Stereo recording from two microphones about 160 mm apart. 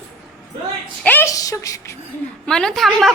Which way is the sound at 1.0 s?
15° left (ahead or behind).